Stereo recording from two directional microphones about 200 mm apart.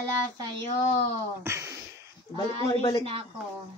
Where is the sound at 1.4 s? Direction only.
15° right (ahead or behind).